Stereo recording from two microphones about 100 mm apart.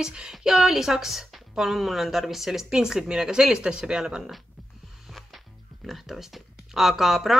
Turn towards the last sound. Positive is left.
turn(degrees=0)  # may be behind; listen again after turning